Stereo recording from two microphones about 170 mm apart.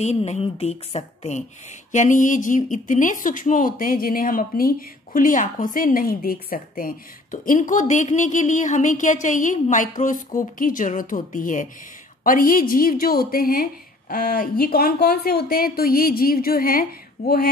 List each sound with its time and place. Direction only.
0.0 s a woman's voice: 40° left (ahead or behind); by 16.8 s 60° left (ahead or behind)